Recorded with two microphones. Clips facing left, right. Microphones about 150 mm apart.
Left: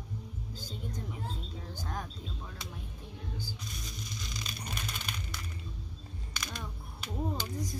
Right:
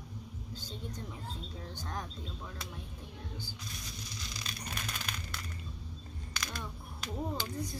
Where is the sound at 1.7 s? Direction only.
10° left (ahead or behind).